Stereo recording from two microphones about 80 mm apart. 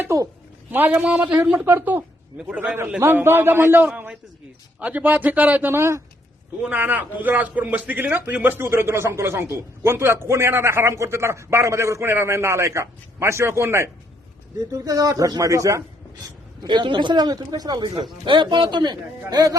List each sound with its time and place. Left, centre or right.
0.1 s a man's voice: right
0.7 s a man's voice: right
1.5 s a man's voice: right; by 2.7 s centre
3.0 s a man's voice: right
3.8 s a man's voice: centre; by 6.0 s right
6.6 s a man's voice: centre; by 13.8 s right
14.7 s speech: right
16.6 s speech: right
17.8 s speech: right
19.3 s speech: right